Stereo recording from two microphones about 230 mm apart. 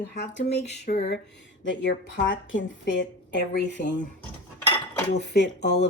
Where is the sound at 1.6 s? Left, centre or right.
Left.